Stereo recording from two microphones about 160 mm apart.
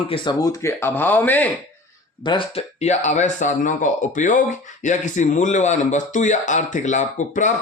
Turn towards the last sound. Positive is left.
turn(degrees=50)  # may be behind; listen again after turning